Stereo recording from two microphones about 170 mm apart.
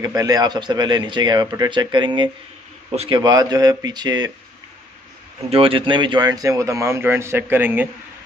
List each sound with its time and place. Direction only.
0.0 s a man's voice: 20° right (ahead or behind)
5.5 s a man's voice: 30° right (ahead or behind); by 7.9 s 10° right (ahead or behind)